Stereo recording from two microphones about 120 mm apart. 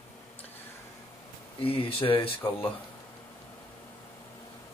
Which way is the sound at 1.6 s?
50° left (ahead or behind).